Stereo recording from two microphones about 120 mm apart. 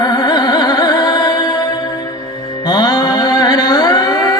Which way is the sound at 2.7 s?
40° left (ahead or behind).